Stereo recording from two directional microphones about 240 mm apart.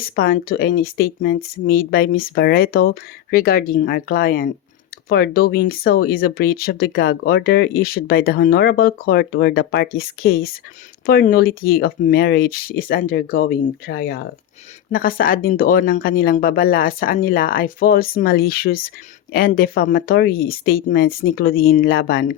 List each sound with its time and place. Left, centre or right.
0.2 s speech: left